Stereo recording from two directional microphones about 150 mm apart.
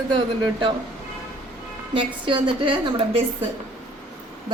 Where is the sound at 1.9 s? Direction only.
35° right (ahead or behind).